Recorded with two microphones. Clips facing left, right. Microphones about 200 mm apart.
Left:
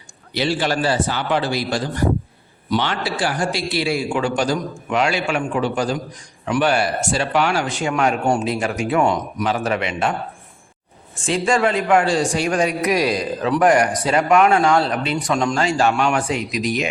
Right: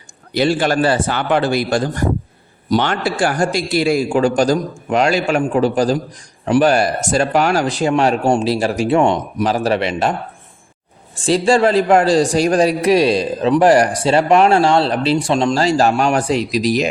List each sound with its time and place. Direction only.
0.3 s a man's voice: 50° right (ahead or behind)